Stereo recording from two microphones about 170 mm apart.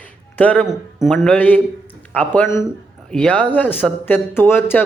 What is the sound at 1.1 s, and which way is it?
A man's voice, 10° left (ahead or behind).